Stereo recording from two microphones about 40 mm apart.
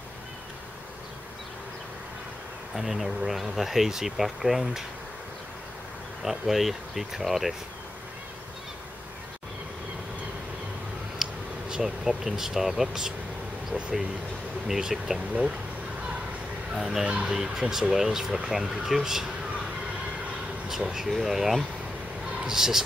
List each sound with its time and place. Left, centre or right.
2.7 s speech: centre
6.2 s speech: centre
11.2 s a sound: centre
11.7 s speech: centre
14.7 s speech: centre
16.7 s speech: centre
17.0 s speech: right
17.3 s speech: centre
20.6 s speech: centre